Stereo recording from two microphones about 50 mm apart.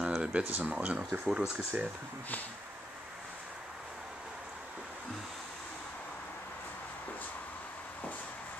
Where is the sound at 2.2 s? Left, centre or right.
Left.